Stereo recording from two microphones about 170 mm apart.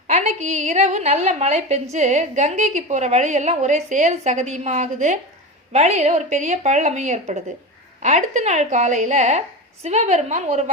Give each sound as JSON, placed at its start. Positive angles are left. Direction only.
{"t": 0.1, "sound": "a woman's voice", "side_deg": -45}